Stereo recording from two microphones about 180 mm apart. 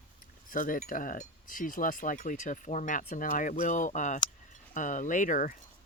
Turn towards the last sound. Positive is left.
turn(degrees=45)  # may be behind; listen again after turning